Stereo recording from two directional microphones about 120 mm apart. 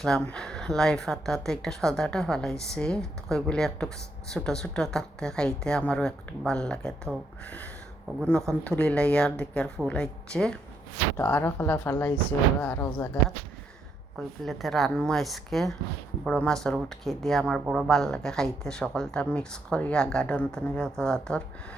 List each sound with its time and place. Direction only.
0.0 s speech: 5° left (ahead or behind)
8.3 s a woman's voice: 5° left (ahead or behind)
11.2 s a woman's voice: 15° left (ahead or behind)
14.2 s speech: centre (ahead or behind)